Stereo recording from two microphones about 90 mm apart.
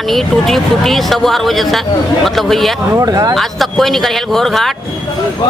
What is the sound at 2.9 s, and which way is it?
Speech, 40° right (ahead or behind).